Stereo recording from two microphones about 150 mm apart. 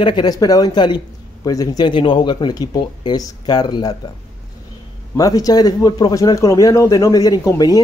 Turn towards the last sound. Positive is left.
turn(degrees=25)  # may be behind; listen again after turning